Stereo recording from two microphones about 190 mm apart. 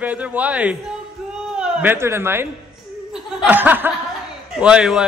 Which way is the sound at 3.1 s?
5° right (ahead or behind).